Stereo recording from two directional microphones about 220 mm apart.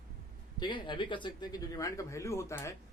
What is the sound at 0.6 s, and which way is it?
Speech, 20° left (ahead or behind).